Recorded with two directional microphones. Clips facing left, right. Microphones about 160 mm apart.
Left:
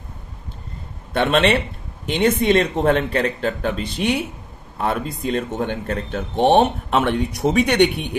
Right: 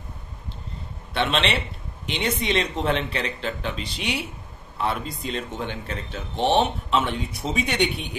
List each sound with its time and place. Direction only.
1.1 s speech: 50° left (ahead or behind)